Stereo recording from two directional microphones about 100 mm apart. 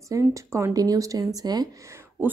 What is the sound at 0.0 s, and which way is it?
Speech, 35° right (ahead or behind).